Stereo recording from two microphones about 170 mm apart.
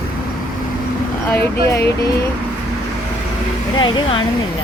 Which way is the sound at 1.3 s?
10° left (ahead or behind).